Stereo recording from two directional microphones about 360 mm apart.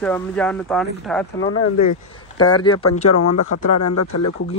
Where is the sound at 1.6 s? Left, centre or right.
Left.